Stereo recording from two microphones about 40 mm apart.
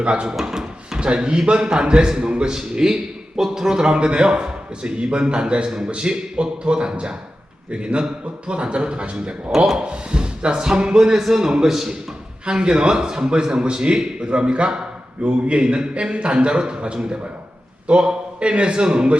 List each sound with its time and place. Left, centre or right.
0.0 s a man's voice: right
0.3 s drawer open or close: centre
0.9 s a man's voice: right
12.5 s a man's voice: right